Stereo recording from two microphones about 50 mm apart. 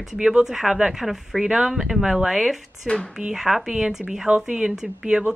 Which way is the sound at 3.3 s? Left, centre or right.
Centre.